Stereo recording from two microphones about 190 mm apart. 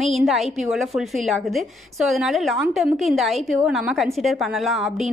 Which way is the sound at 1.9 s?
Centre (ahead or behind).